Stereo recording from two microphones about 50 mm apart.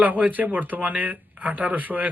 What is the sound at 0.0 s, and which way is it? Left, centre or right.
Speech, right.